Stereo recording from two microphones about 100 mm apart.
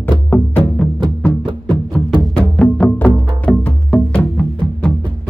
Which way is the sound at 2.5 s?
10° left (ahead or behind).